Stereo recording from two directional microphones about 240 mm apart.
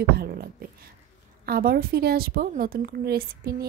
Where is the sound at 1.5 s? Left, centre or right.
Right.